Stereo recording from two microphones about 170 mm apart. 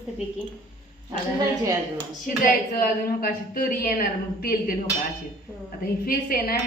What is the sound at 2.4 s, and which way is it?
A woman's voice, 60° left (ahead or behind).